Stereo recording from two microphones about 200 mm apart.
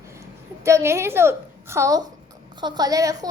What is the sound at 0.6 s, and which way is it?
A woman's voice, 15° right (ahead or behind).